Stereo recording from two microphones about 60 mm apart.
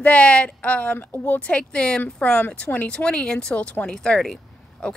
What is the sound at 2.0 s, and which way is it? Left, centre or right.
A woman's voice, left.